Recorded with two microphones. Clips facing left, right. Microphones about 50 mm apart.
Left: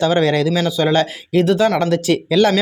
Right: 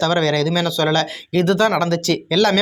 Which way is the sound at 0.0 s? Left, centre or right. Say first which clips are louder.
Left 2 dB; centre.